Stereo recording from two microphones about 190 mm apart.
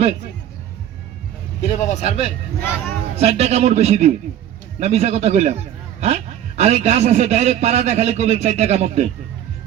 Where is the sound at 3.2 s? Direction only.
35° right (ahead or behind).